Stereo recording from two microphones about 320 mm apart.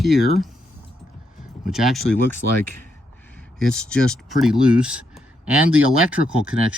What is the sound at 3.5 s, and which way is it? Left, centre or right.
Speech, centre.